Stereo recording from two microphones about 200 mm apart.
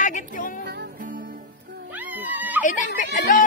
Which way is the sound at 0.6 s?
45° right (ahead or behind).